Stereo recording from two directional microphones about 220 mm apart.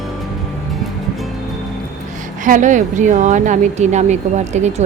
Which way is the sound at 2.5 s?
35° right (ahead or behind).